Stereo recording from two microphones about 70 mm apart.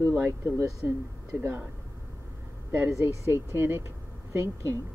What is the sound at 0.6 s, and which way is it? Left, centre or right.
Speech, right.